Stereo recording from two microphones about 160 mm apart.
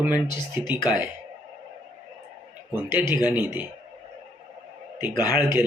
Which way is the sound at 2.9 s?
10° right (ahead or behind).